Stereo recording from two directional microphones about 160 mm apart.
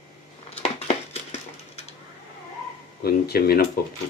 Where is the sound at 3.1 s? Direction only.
75° left (ahead or behind).